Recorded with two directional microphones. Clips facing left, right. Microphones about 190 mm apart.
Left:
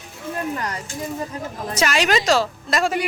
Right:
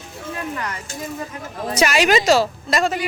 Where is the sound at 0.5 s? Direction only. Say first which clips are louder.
Left 1 dB; 40° left (ahead or behind).